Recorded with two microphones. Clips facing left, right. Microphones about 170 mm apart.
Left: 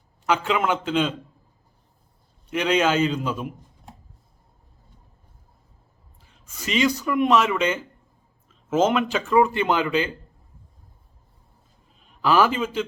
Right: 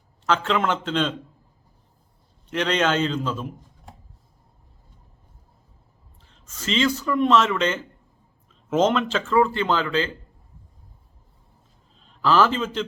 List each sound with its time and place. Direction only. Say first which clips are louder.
0.3 s speech: even; 10° left (ahead or behind)
2.5 s speech: left 1 dB; 10° left (ahead or behind)
6.2 s speech: right 2 dB; 10° left (ahead or behind)
12.0 s a man's voice: even; 10° left (ahead or behind)